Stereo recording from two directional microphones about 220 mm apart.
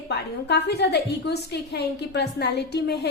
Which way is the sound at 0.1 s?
50° left (ahead or behind).